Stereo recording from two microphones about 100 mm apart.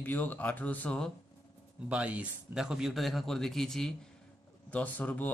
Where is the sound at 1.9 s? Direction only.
10° right (ahead or behind); by 3.9 s 5° left (ahead or behind).